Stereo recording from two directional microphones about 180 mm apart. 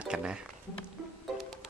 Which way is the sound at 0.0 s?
5° right (ahead or behind).